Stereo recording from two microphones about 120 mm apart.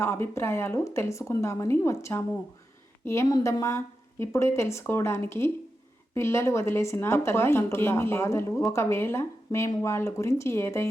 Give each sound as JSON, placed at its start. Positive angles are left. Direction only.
{"t": 0.0, "sound": "a woman's voice", "side_deg": 20}